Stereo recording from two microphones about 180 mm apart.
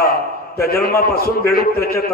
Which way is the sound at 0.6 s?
55° left (ahead or behind).